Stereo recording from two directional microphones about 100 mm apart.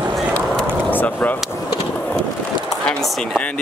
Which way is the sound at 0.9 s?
15° left (ahead or behind).